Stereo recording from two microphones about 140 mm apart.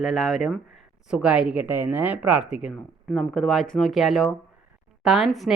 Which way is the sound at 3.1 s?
5° left (ahead or behind).